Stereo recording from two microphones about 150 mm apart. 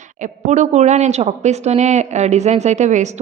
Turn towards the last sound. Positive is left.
turn(degrees=-50)  # may be behind; listen again after turning